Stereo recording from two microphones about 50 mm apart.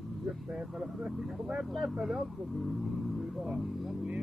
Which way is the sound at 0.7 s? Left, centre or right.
Right.